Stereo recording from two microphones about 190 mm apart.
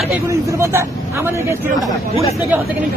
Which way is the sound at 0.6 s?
15° right (ahead or behind).